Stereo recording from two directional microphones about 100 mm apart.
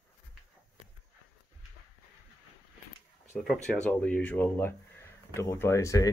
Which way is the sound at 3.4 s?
5° left (ahead or behind).